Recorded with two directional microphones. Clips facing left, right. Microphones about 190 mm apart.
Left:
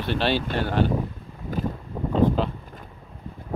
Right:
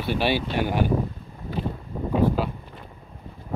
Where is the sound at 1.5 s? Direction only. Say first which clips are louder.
Left 2 dB; 45° left (ahead or behind).